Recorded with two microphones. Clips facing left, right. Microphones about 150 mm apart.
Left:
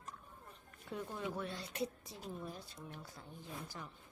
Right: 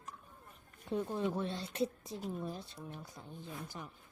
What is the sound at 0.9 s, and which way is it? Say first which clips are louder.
Speech: right 7 dB; 25° right (ahead or behind).